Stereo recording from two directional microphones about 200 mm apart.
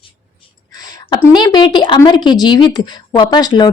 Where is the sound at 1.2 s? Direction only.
20° left (ahead or behind).